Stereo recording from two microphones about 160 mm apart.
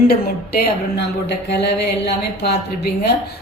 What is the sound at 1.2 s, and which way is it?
Speech, 90° left.